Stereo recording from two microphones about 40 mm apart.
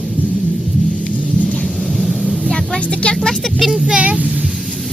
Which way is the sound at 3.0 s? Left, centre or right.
Centre.